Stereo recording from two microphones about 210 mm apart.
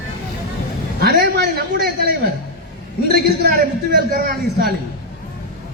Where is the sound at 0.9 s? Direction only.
45° right (ahead or behind).